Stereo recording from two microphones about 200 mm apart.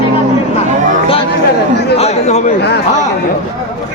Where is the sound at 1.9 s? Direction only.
30° left (ahead or behind).